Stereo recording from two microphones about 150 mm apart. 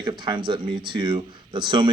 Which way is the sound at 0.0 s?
30° right (ahead or behind).